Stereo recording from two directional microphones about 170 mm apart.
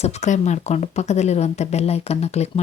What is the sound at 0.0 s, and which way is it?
Speech, 40° left (ahead or behind).